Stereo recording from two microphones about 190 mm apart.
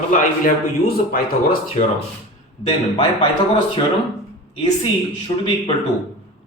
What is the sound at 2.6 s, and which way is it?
Speech, 30° left (ahead or behind).